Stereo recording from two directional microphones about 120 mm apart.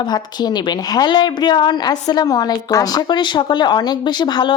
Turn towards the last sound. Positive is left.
turn(degrees=40)  # may be behind; listen again after turning